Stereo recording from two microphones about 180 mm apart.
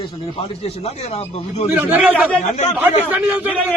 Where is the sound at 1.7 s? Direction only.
10° right (ahead or behind).